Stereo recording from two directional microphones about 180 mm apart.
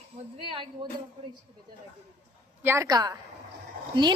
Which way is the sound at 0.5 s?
25° right (ahead or behind).